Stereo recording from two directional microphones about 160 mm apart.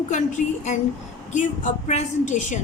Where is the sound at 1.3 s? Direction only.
50° left (ahead or behind).